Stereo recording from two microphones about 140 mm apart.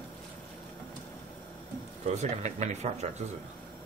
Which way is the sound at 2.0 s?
55° right (ahead or behind).